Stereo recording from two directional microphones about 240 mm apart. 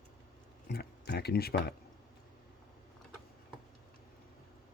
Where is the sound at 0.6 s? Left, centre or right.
Left.